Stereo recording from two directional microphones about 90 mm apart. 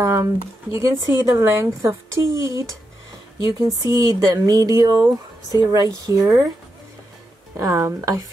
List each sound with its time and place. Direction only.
0.0 s speech: 30° right (ahead or behind)
7.5 s speech: 35° right (ahead or behind)